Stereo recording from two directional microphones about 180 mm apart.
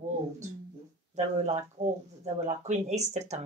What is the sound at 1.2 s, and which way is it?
Speech, 40° right (ahead or behind).